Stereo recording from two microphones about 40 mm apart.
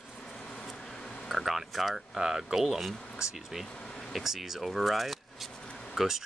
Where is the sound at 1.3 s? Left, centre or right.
Centre.